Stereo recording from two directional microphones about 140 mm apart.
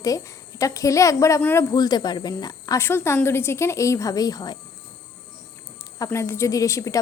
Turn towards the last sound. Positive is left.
turn(degrees=20)  # may be behind; listen again after turning